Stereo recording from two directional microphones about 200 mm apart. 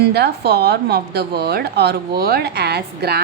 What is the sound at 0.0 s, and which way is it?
A woman's voice, 55° right (ahead or behind).